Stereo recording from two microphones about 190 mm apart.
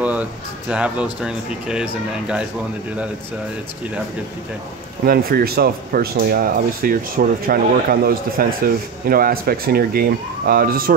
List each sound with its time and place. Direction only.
0.0 s speech: 5° right (ahead or behind)
5.0 s speech: 50° right (ahead or behind)